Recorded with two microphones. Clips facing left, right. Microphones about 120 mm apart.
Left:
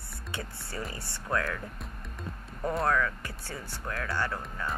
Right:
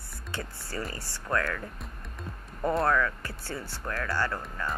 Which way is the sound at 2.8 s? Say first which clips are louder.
Right 1 dB; centre (ahead or behind).